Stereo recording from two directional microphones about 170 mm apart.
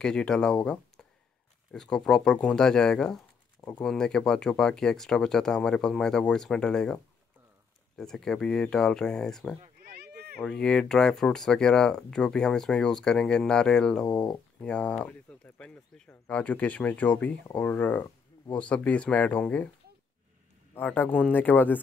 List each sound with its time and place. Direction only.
0.0 s speech: 5° left (ahead or behind)
1.7 s speech: 5° left (ahead or behind)
9.8 s cat: 70° right (ahead or behind)
10.4 s speech: 5° left (ahead or behind)
20.7 s speech: 10° left (ahead or behind)